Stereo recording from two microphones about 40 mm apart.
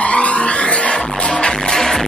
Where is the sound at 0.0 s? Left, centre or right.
Left.